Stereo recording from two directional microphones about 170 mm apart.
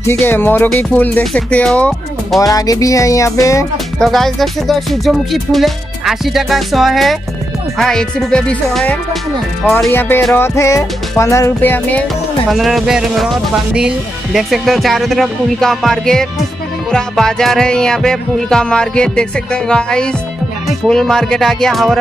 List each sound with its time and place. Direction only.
0.0 s speech: 15° left (ahead or behind)
2.4 s music: 20° left (ahead or behind)
3.7 s speech: centre (ahead or behind)
12.4 s speech: centre (ahead or behind)